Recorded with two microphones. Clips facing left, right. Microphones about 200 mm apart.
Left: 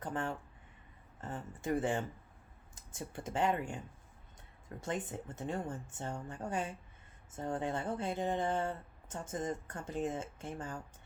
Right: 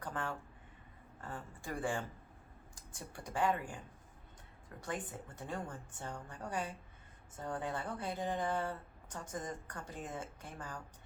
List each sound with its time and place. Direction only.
0.0 s a woman's voice: 25° left (ahead or behind)